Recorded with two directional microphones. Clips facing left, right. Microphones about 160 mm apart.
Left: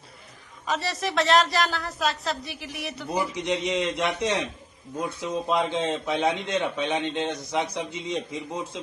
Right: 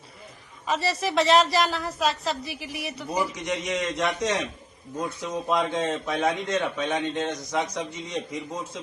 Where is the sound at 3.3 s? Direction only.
30° left (ahead or behind).